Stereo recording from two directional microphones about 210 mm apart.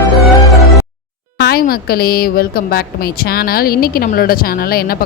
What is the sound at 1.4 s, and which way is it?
A woman's voice, 45° left (ahead or behind).